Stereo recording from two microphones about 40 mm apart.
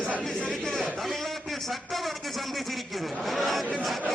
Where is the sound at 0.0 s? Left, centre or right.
Right.